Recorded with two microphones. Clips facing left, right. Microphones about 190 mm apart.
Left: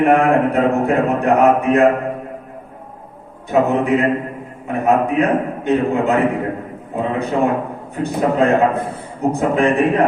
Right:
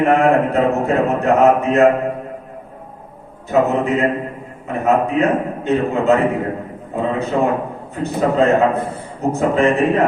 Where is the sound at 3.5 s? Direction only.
15° left (ahead or behind).